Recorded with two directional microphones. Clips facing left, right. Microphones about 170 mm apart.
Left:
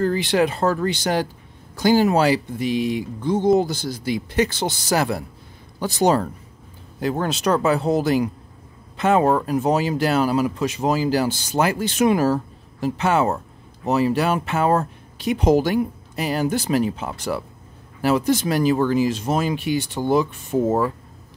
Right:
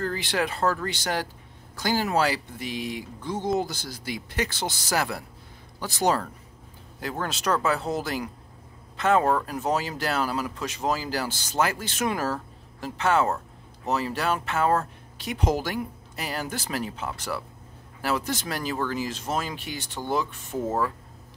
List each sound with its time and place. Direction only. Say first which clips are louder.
0.0 s speech: left 8 dB; 20° left (ahead or behind)
20.6 s speech: left 6 dB; 30° left (ahead or behind)